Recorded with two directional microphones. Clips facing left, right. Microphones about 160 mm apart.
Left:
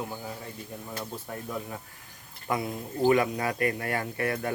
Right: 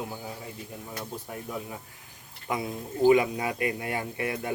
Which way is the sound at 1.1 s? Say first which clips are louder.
Right 1 dB; 10° right (ahead or behind).